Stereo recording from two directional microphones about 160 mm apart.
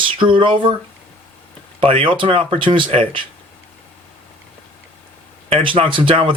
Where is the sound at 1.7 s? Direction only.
35° right (ahead or behind).